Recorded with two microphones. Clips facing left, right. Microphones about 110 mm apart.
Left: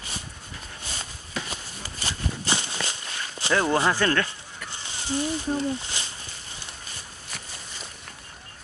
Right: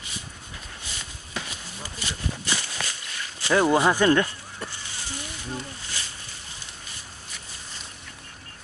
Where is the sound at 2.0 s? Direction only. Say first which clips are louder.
Left 2 dB; 30° left (ahead or behind).